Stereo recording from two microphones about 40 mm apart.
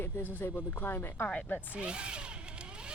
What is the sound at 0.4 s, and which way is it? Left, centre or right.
Speech, left.